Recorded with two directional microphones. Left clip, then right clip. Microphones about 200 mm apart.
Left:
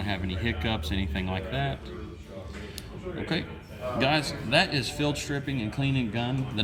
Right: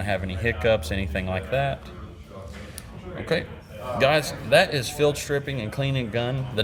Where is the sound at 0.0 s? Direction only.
55° right (ahead or behind).